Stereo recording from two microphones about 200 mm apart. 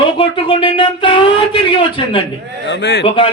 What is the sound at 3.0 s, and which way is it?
Speech, 25° left (ahead or behind).